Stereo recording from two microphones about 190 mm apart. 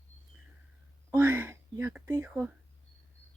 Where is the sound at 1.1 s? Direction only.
10° right (ahead or behind).